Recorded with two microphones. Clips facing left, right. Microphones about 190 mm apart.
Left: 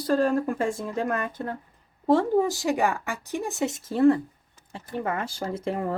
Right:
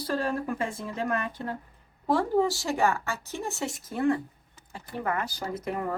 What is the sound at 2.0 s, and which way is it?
A woman's voice, 25° left (ahead or behind).